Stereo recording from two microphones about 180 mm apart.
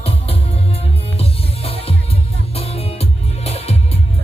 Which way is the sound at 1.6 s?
35° left (ahead or behind).